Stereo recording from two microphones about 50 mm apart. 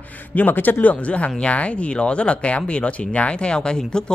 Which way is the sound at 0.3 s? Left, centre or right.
Left.